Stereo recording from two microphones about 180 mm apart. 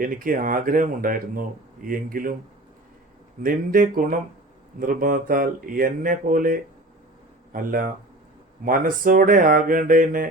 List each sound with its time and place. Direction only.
0.0 s speech: 50° right (ahead or behind)
3.4 s speech: 50° right (ahead or behind)